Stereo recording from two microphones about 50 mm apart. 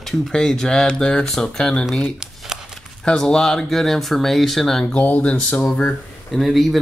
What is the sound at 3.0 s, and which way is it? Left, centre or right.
Speech, centre.